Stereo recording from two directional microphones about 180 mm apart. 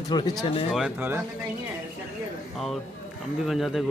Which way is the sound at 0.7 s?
5° right (ahead or behind).